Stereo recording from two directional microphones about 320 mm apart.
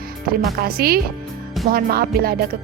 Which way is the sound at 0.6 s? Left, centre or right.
Right.